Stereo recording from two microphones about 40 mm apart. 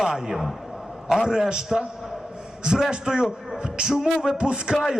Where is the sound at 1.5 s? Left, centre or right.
Centre.